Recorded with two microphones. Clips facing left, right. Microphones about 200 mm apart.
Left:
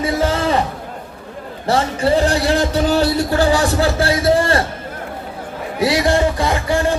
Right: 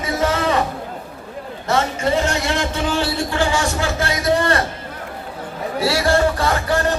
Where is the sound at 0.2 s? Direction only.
30° left (ahead or behind).